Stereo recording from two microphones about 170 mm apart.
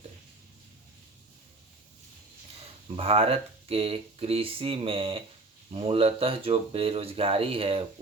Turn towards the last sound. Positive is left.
turn(degrees=-35)  # may be behind; listen again after turning